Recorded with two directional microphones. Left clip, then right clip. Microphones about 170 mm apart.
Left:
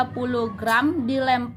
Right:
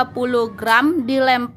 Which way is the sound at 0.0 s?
35° right (ahead or behind).